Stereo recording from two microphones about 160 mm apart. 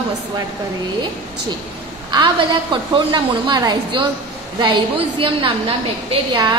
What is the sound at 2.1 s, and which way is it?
A woman's voice, 30° right (ahead or behind).